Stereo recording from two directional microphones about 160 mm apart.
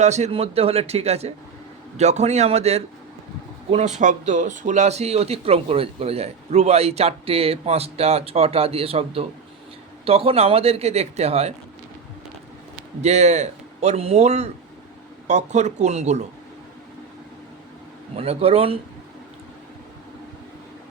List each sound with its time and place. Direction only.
0.0 s a man's voice: 45° right (ahead or behind)
13.0 s a man's voice: 45° right (ahead or behind)
18.2 s speech: 40° right (ahead or behind)